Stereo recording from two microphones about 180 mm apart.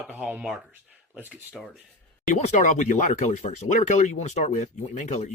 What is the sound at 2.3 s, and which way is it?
Speech, 40° left (ahead or behind).